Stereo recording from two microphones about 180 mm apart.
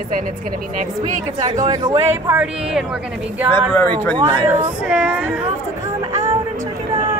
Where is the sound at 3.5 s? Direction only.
10° left (ahead or behind).